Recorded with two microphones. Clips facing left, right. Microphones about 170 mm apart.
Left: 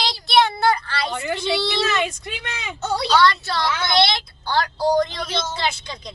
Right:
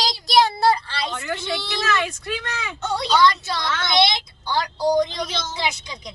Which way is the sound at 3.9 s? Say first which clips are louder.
Right 2 dB; 15° right (ahead or behind).